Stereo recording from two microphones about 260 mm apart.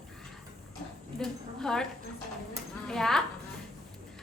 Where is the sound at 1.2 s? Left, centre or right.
Centre.